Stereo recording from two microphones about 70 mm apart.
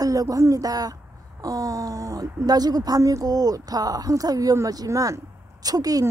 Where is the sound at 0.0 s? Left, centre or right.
Right.